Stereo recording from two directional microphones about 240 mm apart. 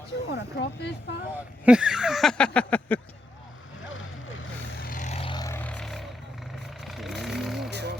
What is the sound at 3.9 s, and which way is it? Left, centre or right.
Vehicle, left.